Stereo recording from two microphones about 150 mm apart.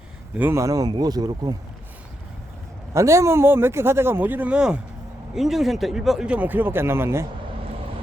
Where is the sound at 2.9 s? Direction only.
20° right (ahead or behind).